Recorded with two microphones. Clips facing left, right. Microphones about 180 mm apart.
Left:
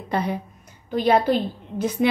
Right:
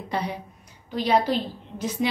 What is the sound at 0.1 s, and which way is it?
A woman's voice, 50° left (ahead or behind).